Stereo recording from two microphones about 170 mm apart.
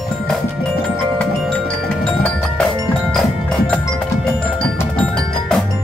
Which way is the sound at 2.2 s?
5° left (ahead or behind).